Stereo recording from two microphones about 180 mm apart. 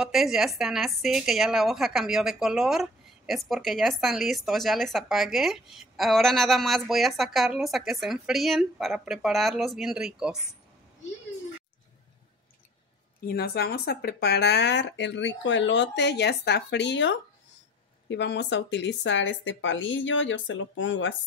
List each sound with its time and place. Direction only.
0.0 s a woman's voice: centre (ahead or behind)
13.3 s speech: 60° left (ahead or behind); by 21.1 s 90° left